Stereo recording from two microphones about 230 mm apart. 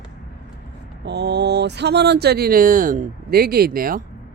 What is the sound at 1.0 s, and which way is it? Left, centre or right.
Speech, right.